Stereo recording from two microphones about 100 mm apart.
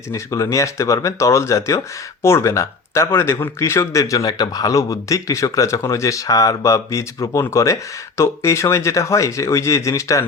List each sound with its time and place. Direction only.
0.1 s speech: 35° left (ahead or behind)